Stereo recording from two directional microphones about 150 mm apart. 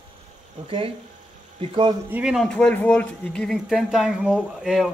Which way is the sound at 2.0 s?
10° right (ahead or behind).